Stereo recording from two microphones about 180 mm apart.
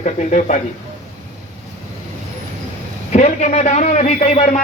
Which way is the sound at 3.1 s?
40° left (ahead or behind).